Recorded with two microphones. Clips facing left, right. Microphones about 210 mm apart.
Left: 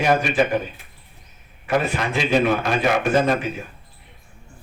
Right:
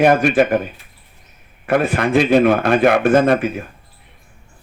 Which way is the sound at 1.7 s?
55° right (ahead or behind).